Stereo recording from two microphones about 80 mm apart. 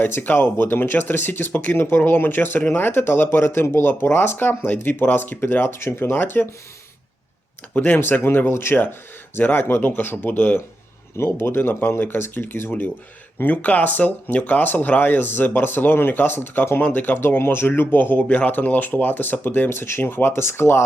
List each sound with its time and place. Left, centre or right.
0.0 s speech: left
7.7 s speech: left